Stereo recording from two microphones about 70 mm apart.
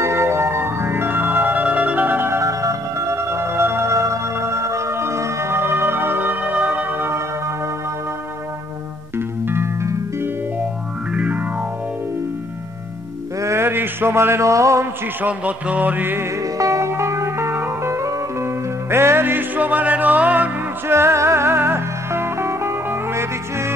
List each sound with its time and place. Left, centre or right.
0.0 s music: right
2.4 s music: right
11.1 s music: right
13.4 s a sound: right
15.2 s music: right
16.5 s music: right
20.9 s music: right